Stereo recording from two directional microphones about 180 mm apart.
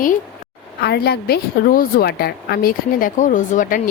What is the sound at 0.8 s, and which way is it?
A woman's voice, 65° left (ahead or behind).